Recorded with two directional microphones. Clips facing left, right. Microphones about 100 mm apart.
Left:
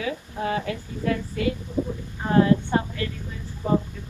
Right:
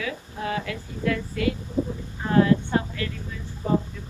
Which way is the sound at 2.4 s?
30° left (ahead or behind).